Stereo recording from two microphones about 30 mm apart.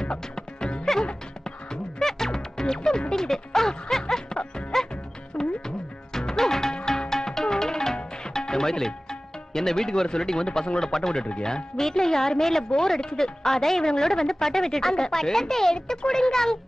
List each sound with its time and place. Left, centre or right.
0.0 s music: left
2.0 s music: centre
3.1 s speech: centre
4.7 s music: centre
5.3 s music: left
6.1 s music: centre
9.5 s a woman's voice: centre